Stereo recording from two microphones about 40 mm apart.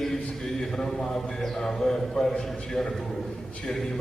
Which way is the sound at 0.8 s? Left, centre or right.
Centre.